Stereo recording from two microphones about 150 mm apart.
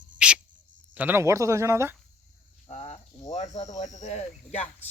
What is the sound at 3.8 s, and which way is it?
Speech, 55° left (ahead or behind).